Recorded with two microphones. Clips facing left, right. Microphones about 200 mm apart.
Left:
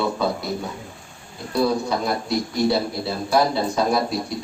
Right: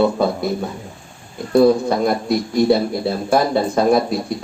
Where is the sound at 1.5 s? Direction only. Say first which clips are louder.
Right 8 dB; 50° right (ahead or behind).